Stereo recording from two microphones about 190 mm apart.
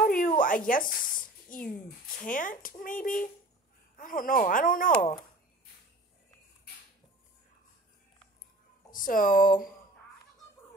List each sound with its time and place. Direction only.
0.0 s a sound: 50° left (ahead or behind)
1.5 s speech: 45° left (ahead or behind)
8.9 s speech: 45° left (ahead or behind)